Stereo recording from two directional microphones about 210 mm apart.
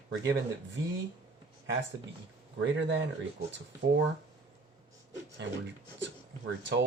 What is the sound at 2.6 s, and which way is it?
Speech, 60° right (ahead or behind).